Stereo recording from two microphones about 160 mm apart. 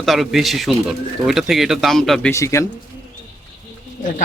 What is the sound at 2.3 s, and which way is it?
Speech, 20° left (ahead or behind).